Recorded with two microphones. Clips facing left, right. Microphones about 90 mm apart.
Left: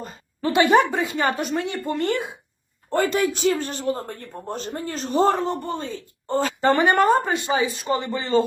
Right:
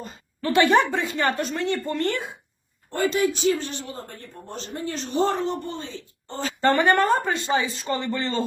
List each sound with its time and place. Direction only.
0.4 s speech: 20° left (ahead or behind)
3.0 s speech: 55° left (ahead or behind)
6.6 s speech: 15° left (ahead or behind)